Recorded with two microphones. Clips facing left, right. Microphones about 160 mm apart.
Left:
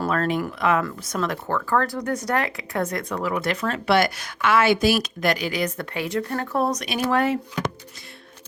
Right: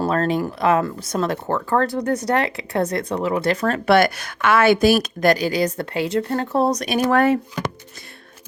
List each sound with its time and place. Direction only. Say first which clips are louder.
0.0 s speech: right 3 dB; 35° right (ahead or behind)
3.6 s speech: right 4 dB; 50° right (ahead or behind)
7.1 s speech: right 4 dB; 55° right (ahead or behind)